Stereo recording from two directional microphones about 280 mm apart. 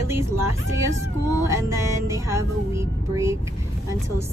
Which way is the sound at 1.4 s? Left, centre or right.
Centre.